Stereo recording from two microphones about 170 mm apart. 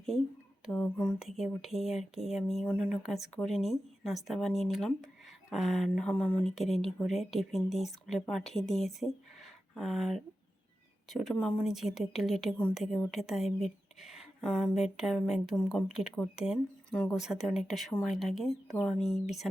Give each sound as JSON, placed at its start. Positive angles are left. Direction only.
{"t": 0.7, "sound": "speech", "side_deg": 10}